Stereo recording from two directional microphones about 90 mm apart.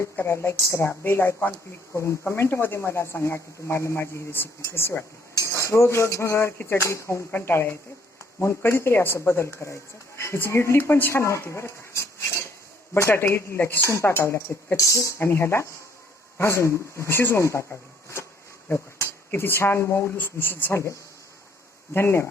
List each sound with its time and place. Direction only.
0.0 s speech: 30° left (ahead or behind)
18.7 s speech: 25° left (ahead or behind)